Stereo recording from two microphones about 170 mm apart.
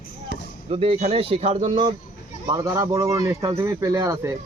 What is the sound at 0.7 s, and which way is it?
Speech, 35° right (ahead or behind).